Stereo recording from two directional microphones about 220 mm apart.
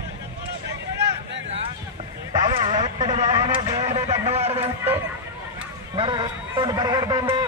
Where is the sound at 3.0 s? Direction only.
20° right (ahead or behind).